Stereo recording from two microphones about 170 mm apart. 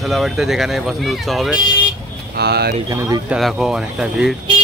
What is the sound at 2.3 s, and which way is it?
Speech, 70° right (ahead or behind).